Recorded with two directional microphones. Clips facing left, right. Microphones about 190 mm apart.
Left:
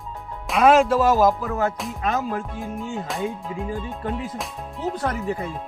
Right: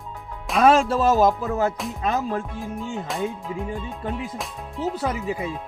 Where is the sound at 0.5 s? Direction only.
30° right (ahead or behind).